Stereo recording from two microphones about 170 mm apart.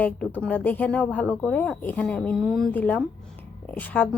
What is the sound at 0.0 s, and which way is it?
Speech, 10° left (ahead or behind).